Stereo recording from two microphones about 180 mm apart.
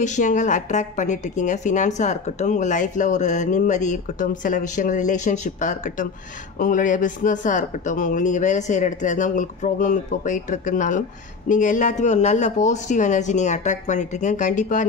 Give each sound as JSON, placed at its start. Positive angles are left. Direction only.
{"t": 0.0, "sound": "speech", "side_deg": 40}